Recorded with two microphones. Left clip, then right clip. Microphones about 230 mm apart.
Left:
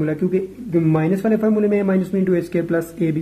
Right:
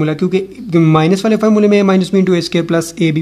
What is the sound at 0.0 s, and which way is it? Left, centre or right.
Speech, right.